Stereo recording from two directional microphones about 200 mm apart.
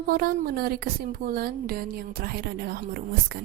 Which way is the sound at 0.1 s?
45° right (ahead or behind).